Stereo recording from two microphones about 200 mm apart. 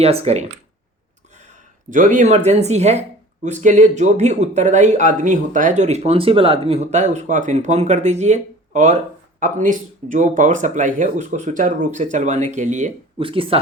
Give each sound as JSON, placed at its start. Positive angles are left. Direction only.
{"t": 0.0, "sound": "speech", "side_deg": -30}
{"t": 1.9, "sound": "speech", "side_deg": -40}